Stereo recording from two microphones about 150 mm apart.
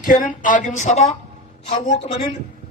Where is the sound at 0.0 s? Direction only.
60° left (ahead or behind).